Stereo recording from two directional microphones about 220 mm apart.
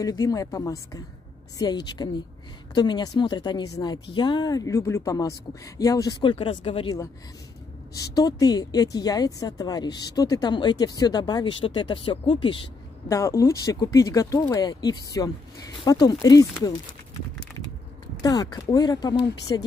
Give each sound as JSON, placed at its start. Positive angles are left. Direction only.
{"t": 0.0, "sound": "a woman's voice", "side_deg": 15}
{"t": 18.2, "sound": "a woman's voice", "side_deg": 15}